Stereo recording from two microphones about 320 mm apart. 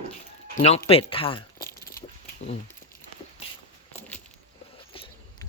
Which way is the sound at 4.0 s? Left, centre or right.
Centre.